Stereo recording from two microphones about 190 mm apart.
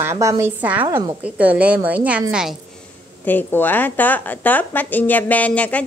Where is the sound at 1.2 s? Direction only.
10° right (ahead or behind).